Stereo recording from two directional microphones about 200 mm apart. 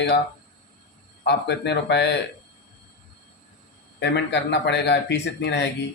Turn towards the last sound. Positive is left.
turn(degrees=60)  # may be behind; listen again after turning